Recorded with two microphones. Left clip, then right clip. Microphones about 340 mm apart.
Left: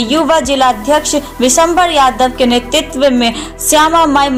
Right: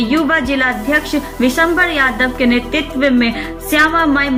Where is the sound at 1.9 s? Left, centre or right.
Centre.